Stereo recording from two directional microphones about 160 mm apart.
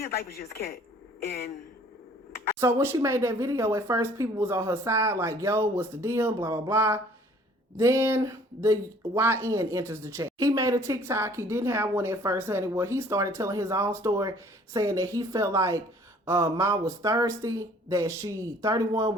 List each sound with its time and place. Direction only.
0.0 s a man's voice: 75° left (ahead or behind)
2.6 s speech: 15° right (ahead or behind)